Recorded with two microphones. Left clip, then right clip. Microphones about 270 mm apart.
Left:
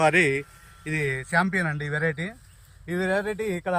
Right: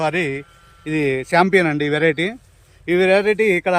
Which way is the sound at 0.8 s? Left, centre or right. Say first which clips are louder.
Right 8 dB; right.